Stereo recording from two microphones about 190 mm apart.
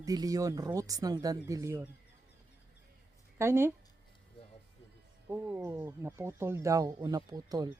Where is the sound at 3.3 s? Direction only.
15° right (ahead or behind).